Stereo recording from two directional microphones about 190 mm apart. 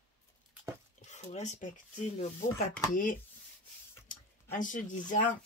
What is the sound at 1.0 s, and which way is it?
Speech, 40° left (ahead or behind).